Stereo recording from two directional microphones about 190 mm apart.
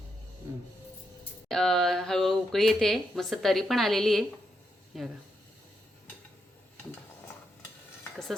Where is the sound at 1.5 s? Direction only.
5° left (ahead or behind).